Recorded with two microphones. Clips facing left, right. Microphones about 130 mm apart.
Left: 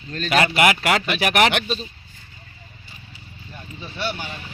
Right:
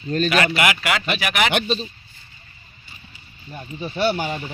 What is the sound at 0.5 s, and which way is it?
Speech, 30° left (ahead or behind).